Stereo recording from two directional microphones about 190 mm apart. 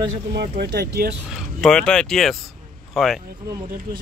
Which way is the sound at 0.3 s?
60° right (ahead or behind).